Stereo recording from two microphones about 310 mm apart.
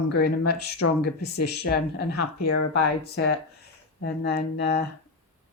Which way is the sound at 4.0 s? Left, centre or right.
Left.